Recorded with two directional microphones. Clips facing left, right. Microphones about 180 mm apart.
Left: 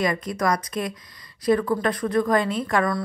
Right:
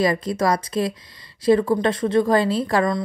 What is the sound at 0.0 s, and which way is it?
Speech, 30° right (ahead or behind).